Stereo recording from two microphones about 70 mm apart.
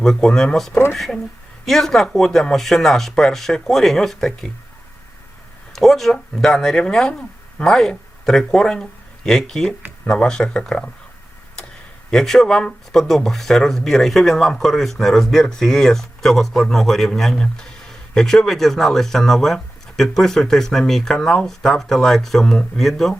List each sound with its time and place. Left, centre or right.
0.0 s speech: centre
0.7 s speech: left
0.9 s speech: centre
5.7 s speech: centre
12.1 s speech: centre